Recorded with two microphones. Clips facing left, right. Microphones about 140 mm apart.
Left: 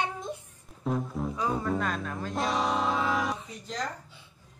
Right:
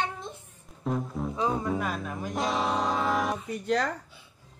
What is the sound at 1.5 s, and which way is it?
Speech, 5° right (ahead or behind).